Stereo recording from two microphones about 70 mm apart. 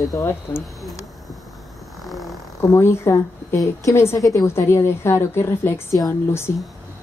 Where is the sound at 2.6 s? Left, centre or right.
Left.